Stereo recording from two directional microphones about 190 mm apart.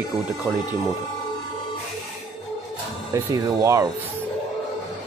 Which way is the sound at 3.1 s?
15° right (ahead or behind).